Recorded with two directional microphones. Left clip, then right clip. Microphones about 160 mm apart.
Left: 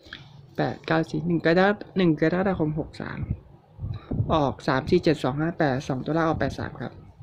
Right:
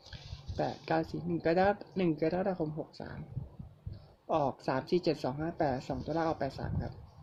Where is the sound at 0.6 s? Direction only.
45° left (ahead or behind).